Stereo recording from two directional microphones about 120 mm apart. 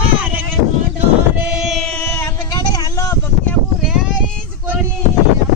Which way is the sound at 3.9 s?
5° right (ahead or behind).